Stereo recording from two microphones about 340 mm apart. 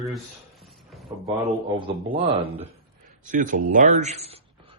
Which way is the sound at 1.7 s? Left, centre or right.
Centre.